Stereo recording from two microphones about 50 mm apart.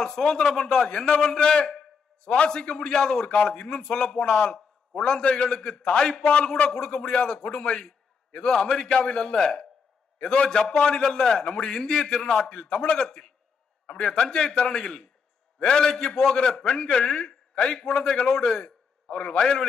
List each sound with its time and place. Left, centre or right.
0.0 s a man's voice: centre
6.7 s a man's voice: centre
19.1 s speech: left